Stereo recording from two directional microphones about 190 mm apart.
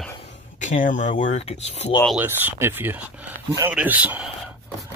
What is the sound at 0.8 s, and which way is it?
Speech, 40° left (ahead or behind).